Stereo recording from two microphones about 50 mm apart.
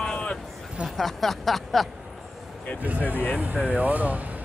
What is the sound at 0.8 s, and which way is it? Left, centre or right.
Speech, centre.